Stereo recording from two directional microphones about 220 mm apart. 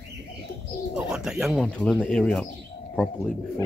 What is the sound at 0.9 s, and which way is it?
Speech, 5° right (ahead or behind).